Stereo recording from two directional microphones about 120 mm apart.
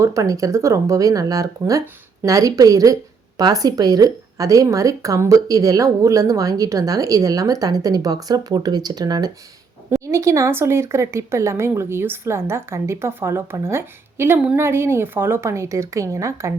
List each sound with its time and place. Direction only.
0.0 s a woman's voice: 25° right (ahead or behind)